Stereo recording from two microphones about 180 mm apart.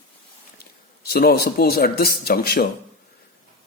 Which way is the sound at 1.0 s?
60° left (ahead or behind).